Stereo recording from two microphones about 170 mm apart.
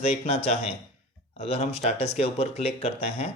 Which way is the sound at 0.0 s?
40° left (ahead or behind).